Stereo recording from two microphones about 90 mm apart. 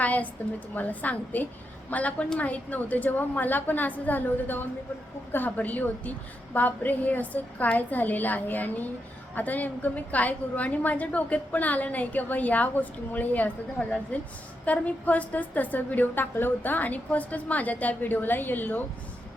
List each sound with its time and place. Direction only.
0.0 s a woman's voice: 15° left (ahead or behind)